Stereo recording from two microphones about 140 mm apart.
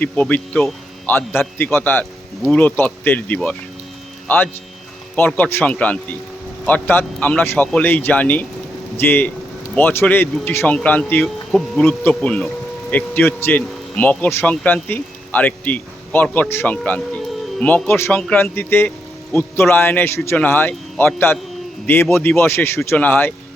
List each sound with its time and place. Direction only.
0.0 s speech: 10° left (ahead or behind)
5.1 s speech: 10° left (ahead or behind)
11.5 s speech: centre (ahead or behind)
11.9 s speech: 10° left (ahead or behind)